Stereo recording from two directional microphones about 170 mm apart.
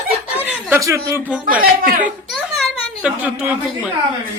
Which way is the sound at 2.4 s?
Centre (ahead or behind).